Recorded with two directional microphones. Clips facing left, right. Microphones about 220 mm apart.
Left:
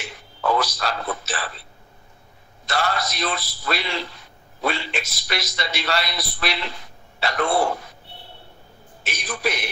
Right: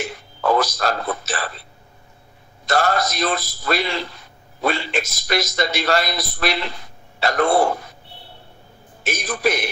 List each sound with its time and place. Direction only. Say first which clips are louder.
0.0 s a man's voice: right 4 dB; 45° right (ahead or behind)
2.6 s a man's voice: right 5 dB; 45° right (ahead or behind)
9.0 s a man's voice: right 5 dB; 45° right (ahead or behind)